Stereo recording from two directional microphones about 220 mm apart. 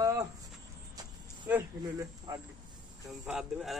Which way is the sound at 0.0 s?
15° right (ahead or behind).